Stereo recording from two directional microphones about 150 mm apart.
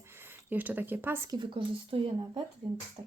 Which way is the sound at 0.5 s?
10° right (ahead or behind).